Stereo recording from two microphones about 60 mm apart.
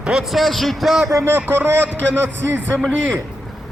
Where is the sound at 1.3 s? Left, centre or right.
Right.